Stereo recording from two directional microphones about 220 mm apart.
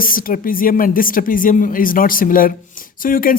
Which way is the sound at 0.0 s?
40° left (ahead or behind).